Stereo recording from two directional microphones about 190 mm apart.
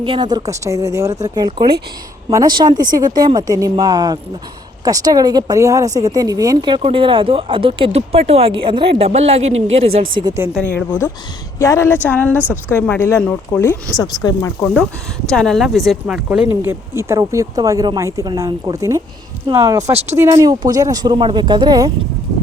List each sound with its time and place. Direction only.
0.0 s speech: 25° right (ahead or behind)
10.2 s speech: 15° right (ahead or behind)
10.5 s speech: 5° left (ahead or behind)
12.4 s speech: 10° right (ahead or behind)
12.7 s speech: 10° left (ahead or behind)
14.6 s speech: 5° left (ahead or behind); by 21.9 s 20° right (ahead or behind)